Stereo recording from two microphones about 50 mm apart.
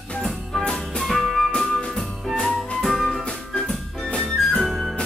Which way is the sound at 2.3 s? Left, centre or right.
Centre.